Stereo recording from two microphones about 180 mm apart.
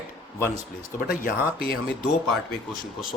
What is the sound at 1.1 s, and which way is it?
Speech, 50° left (ahead or behind).